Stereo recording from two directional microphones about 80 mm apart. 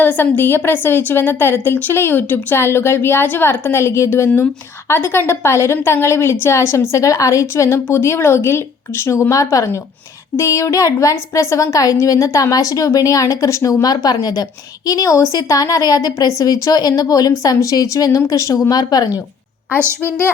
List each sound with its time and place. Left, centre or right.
0.0 s a woman's voice: left
9.3 s a woman's voice: left
13.8 s speech: left
14.8 s a woman's voice: left
19.8 s a woman's voice: right